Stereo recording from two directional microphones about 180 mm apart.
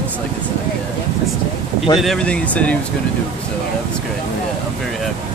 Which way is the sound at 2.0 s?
5° left (ahead or behind).